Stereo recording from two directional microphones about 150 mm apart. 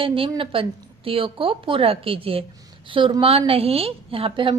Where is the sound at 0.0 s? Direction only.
35° right (ahead or behind).